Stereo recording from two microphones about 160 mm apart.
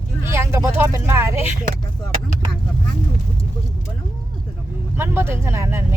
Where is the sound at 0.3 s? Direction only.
15° right (ahead or behind).